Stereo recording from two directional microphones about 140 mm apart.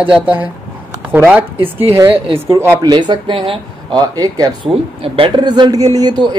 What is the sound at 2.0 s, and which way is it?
A man's voice, 35° right (ahead or behind).